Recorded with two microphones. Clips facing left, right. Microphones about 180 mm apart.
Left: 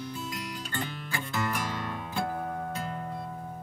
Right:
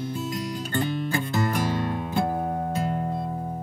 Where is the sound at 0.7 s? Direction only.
35° right (ahead or behind).